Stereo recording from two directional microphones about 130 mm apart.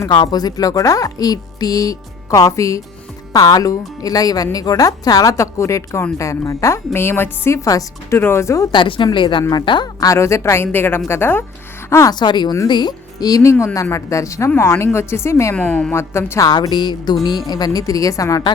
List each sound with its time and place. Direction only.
0.1 s a woman's voice: 35° left (ahead or behind)
8.7 s a woman's voice: 40° left (ahead or behind); by 12.1 s 20° left (ahead or behind)
12.1 s a woman's voice: 35° left (ahead or behind)
15.5 s speech: 5° left (ahead or behind)
15.9 s a woman's voice: 20° left (ahead or behind)